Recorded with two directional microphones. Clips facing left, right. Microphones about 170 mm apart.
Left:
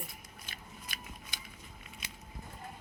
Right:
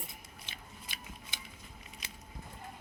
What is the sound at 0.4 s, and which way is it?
Scissors, 20° right (ahead or behind).